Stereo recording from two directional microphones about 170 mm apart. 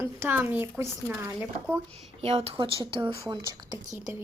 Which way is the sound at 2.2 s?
35° right (ahead or behind).